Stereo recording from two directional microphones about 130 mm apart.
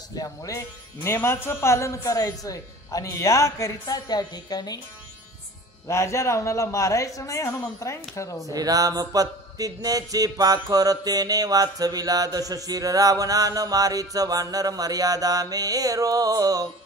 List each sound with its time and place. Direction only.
0.1 s a man's voice: 30° left (ahead or behind)
5.9 s a man's voice: 20° left (ahead or behind)
8.5 s a sound: 30° right (ahead or behind)